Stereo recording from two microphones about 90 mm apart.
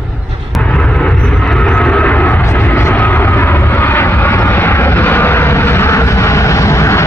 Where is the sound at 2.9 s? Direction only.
20° left (ahead or behind).